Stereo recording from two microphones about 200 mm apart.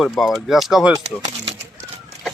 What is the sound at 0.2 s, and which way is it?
Speech, centre (ahead or behind).